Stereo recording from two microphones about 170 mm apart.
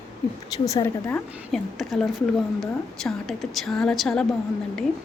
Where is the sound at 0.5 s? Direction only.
20° left (ahead or behind).